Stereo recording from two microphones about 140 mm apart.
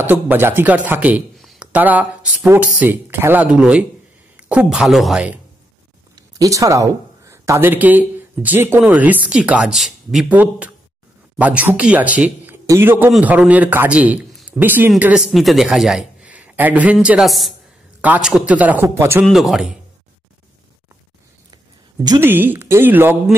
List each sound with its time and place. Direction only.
0.0 s speech: 15° right (ahead or behind)
1.4 s a sound: centre (ahead or behind)
1.7 s a woman's voice: 10° right (ahead or behind)
6.1 s a man's voice: 25° right (ahead or behind)
19.2 s a woman's voice: centre (ahead or behind)
22.2 s speech: 15° right (ahead or behind)